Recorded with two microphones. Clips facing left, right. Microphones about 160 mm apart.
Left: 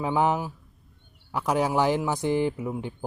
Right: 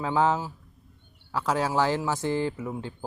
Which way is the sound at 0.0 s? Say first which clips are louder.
Even; 15° left (ahead or behind).